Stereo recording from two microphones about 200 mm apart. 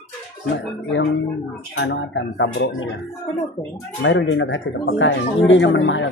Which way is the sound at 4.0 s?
65° left (ahead or behind).